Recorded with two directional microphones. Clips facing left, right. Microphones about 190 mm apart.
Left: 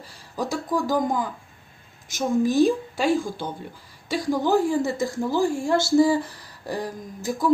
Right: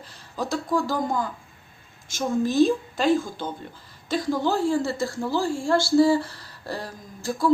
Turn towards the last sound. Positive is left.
turn(degrees=15)  # may be behind; listen again after turning